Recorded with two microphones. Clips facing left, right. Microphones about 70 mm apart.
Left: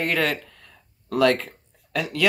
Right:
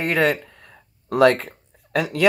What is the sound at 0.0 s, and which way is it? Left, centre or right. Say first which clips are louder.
Speech: right 4 dB; right.